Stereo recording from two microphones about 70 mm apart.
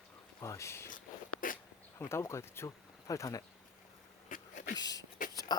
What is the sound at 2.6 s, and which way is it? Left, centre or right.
Speech, left.